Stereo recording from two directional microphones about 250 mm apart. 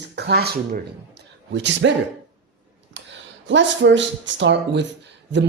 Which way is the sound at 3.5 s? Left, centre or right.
Right.